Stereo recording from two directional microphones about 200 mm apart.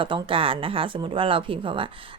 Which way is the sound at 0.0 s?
25° right (ahead or behind).